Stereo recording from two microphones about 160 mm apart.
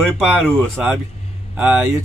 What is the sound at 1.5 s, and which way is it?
Speech, 5° right (ahead or behind).